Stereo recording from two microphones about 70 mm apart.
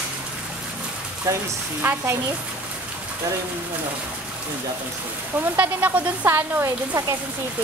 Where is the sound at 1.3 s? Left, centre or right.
Right.